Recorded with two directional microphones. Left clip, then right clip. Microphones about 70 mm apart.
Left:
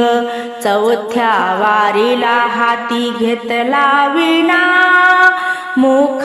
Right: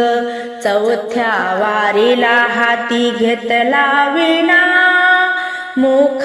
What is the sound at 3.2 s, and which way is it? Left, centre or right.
Mantra, left.